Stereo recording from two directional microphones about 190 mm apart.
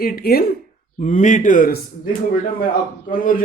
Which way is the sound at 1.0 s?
40° left (ahead or behind).